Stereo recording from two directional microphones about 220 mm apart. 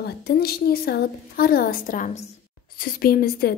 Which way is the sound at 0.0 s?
45° left (ahead or behind).